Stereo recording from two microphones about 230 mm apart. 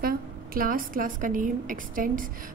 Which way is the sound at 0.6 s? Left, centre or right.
Right.